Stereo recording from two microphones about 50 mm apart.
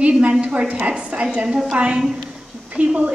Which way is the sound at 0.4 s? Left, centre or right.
Right.